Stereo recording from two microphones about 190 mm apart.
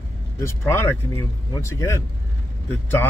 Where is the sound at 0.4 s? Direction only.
15° left (ahead or behind).